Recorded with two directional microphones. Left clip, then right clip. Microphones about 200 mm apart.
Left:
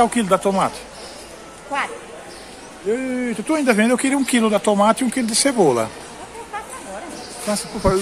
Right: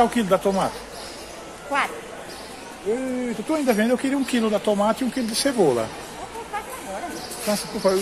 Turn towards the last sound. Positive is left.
turn(degrees=15)  # may be behind; listen again after turning